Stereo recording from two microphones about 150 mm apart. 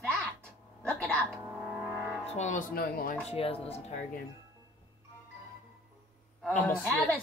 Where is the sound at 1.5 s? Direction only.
10° right (ahead or behind).